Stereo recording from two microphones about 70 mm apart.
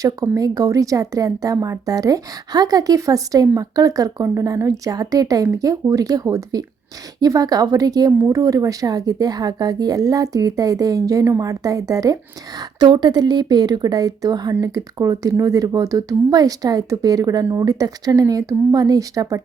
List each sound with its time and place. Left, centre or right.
0.0 s speech: right
12.5 s a woman's voice: right
14.6 s speech: right